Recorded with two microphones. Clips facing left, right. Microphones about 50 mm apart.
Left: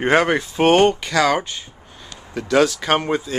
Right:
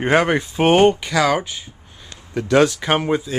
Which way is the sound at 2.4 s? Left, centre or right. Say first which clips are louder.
Right 1 dB; right.